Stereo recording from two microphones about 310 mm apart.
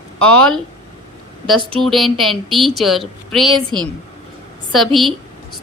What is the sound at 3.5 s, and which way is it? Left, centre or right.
Speech, centre.